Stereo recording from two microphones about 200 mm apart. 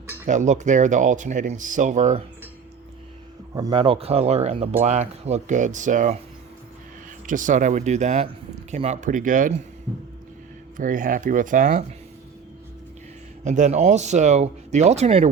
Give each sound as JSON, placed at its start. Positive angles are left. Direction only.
{"t": 0.3, "sound": "speech", "side_deg": -35}
{"t": 3.5, "sound": "speech", "side_deg": -20}
{"t": 7.3, "sound": "speech", "side_deg": -40}
{"t": 10.8, "sound": "speech", "side_deg": -40}
{"t": 13.4, "sound": "speech", "side_deg": -35}